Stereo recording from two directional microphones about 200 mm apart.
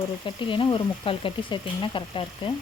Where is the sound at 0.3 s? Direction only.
25° left (ahead or behind).